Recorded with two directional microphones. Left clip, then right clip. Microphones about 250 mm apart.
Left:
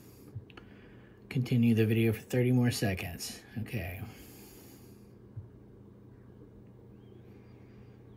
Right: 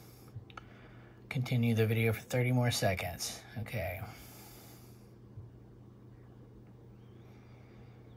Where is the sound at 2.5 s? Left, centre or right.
Centre.